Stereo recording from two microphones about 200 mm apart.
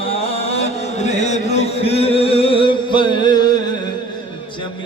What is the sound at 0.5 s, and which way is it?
Music, 35° left (ahead or behind).